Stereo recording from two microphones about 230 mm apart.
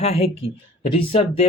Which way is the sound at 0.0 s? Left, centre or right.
Left.